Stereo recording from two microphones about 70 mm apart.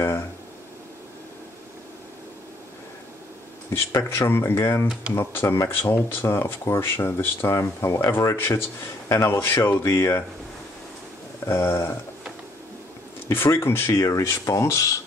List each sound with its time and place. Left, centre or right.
3.7 s speech: left
11.4 s speech: left
13.3 s speech: left
13.9 s speech: left